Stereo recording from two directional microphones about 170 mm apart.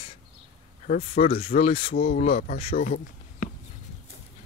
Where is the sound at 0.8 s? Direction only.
50° left (ahead or behind).